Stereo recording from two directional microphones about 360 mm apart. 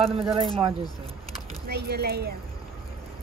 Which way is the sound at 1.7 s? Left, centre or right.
Right.